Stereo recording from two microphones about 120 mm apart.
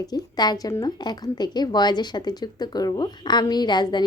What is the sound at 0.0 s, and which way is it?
A woman's voice, 35° left (ahead or behind).